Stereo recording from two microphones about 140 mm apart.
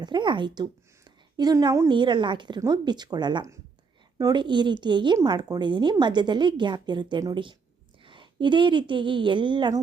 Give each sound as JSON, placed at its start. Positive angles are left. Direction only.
{"t": 0.0, "sound": "a woman's voice", "side_deg": -35}
{"t": 1.9, "sound": "a woman's voice", "side_deg": -35}